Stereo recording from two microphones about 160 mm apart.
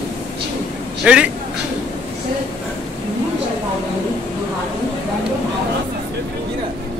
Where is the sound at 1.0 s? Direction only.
5° right (ahead or behind).